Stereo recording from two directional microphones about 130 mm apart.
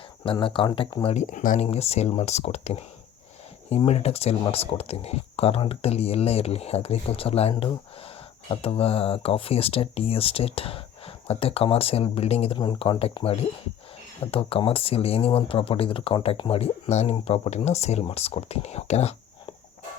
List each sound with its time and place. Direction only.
0.3 s speech: 40° left (ahead or behind)
1.0 s speech: 60° left (ahead or behind); by 1.6 s 85° left
1.6 s speech: 55° left (ahead or behind)
12.5 s speech: 40° left (ahead or behind); by 19.1 s 55° left (ahead or behind)